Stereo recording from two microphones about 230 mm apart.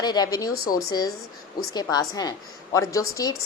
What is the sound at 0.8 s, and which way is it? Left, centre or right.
A woman's voice, centre.